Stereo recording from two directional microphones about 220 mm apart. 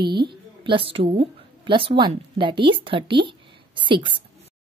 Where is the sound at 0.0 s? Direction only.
20° right (ahead or behind).